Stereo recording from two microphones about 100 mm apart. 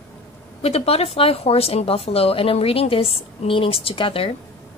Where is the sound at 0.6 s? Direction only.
90° left; by 4.3 s 70° left (ahead or behind).